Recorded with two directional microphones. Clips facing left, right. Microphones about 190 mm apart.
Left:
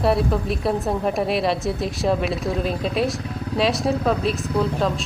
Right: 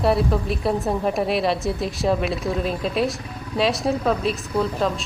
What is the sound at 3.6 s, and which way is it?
Speech, centre (ahead or behind).